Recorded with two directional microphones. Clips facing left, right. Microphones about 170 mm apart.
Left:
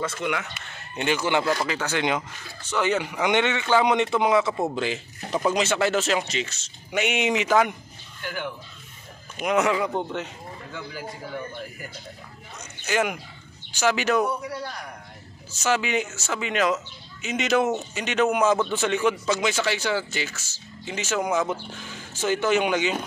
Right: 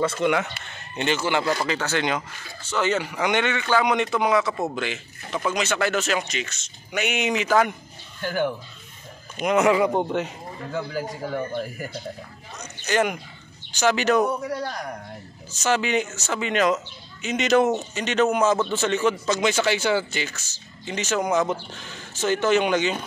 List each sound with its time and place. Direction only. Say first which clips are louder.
0.0 s speech: right 6 dB; 30° right (ahead or behind)
0.9 s speech: even; 10° left (ahead or behind)
9.4 s speech: right 3 dB; centre (ahead or behind)
10.7 s speech: right 8 dB; 40° right (ahead or behind)
12.8 s speech: right 2 dB; 5° left (ahead or behind)
14.2 s a man's voice: right 3 dB; 45° right (ahead or behind)
15.6 s speech: right 2 dB; 5° left (ahead or behind)